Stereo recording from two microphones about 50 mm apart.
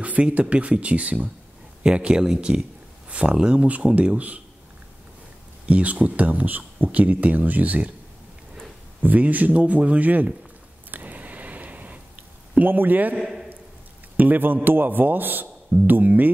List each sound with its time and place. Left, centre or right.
0.0 s speech: right
5.7 s speech: right
9.0 s speech: right
10.9 s a sound: right
12.5 s speech: right
14.1 s speech: right